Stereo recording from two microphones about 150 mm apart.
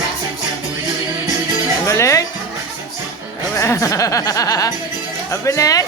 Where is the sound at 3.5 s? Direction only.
20° left (ahead or behind).